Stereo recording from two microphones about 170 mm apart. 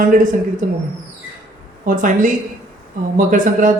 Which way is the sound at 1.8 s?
50° right (ahead or behind).